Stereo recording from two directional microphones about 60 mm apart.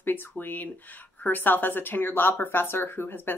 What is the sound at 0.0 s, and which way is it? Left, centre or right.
A woman's voice, left.